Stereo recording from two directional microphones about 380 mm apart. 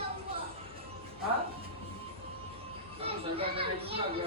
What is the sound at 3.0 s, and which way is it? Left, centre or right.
Children playing, centre.